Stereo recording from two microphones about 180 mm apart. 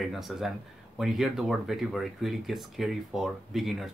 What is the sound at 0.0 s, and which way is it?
Speech, centre (ahead or behind).